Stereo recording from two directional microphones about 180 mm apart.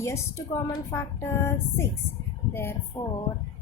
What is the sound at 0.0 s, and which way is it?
A woman's voice, 15° left (ahead or behind).